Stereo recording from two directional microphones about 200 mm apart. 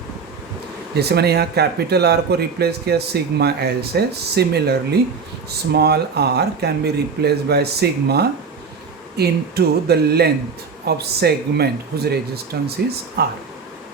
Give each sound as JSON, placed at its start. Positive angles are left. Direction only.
{"t": 0.9, "sound": "a man's voice", "side_deg": -55}